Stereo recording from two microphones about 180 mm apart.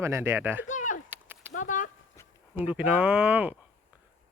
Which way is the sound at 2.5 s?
5° right (ahead or behind).